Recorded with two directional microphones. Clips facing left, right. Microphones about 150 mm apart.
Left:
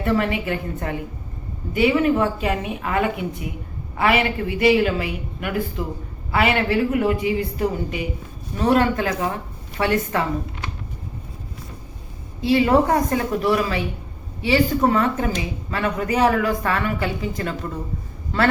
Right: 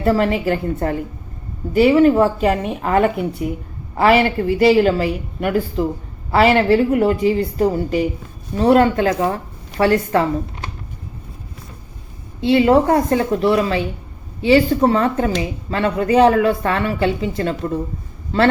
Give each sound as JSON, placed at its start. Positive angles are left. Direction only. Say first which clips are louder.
{"t": 0.0, "sound": "a woman's voice", "louder": "right 5 dB", "side_deg": -35}
{"t": 12.5, "sound": "a woman's voice", "louder": "right 4 dB", "side_deg": -30}